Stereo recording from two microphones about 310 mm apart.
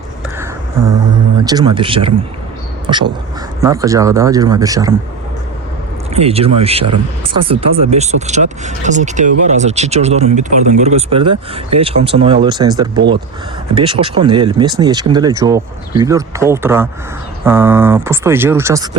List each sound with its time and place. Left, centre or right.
1.5 s speech: centre
6.1 s speech: centre